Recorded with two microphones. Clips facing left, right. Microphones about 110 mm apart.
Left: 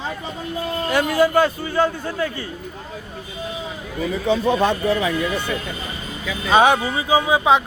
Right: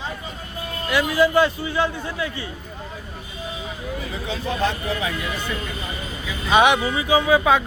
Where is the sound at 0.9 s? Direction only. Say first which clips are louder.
Left 1 dB; 50° left (ahead or behind).